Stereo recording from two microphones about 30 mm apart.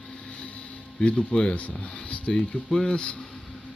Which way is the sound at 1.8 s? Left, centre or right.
Left.